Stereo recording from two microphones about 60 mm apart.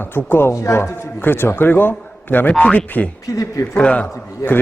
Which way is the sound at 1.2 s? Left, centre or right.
Left.